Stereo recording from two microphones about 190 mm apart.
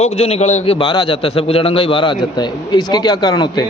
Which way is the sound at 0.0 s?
30° left (ahead or behind).